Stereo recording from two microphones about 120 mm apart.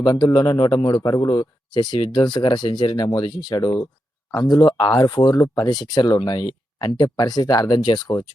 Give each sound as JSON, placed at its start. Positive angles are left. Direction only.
{"t": 0.0, "sound": "speech", "side_deg": 35}
{"t": 5.6, "sound": "speech", "side_deg": 35}